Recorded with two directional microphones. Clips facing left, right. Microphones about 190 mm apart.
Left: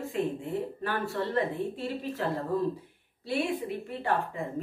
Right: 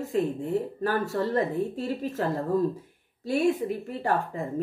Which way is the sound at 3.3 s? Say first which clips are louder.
Right 6 dB; 45° right (ahead or behind).